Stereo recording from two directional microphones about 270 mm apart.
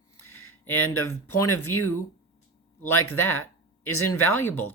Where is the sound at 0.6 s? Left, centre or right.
Centre.